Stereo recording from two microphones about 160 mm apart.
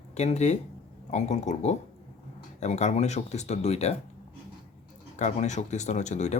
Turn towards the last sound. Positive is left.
turn(degrees=45)  # may be behind; listen again after turning